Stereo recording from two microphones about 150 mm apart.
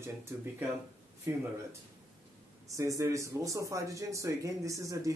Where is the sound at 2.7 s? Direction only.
20° right (ahead or behind).